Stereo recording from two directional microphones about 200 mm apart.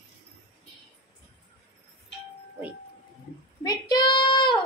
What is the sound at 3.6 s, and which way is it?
Child singing, 20° left (ahead or behind).